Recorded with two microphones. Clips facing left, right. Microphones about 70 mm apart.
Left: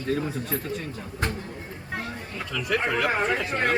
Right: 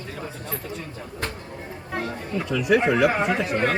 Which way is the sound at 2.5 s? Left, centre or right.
Centre.